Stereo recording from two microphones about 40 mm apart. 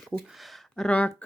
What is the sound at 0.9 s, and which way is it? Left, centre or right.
Speech, left.